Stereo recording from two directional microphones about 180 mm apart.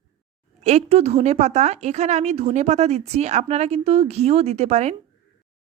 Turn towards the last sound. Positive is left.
turn(degrees=-40)  # may be behind; listen again after turning